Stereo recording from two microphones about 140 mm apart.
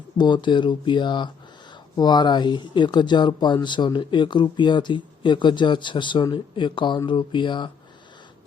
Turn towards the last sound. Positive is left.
turn(degrees=35)  # may be behind; listen again after turning